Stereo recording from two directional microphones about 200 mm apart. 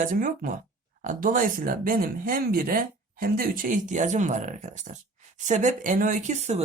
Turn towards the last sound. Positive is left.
turn(degrees=-35)  # may be behind; listen again after turning